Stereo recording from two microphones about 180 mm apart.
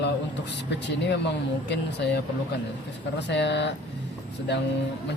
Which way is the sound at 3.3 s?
75° left (ahead or behind).